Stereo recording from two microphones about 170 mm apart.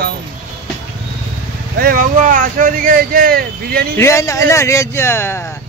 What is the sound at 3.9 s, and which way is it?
Speech, 15° left (ahead or behind).